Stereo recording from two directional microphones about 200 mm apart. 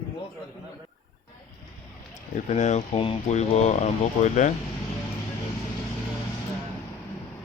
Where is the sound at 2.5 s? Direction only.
35° left (ahead or behind).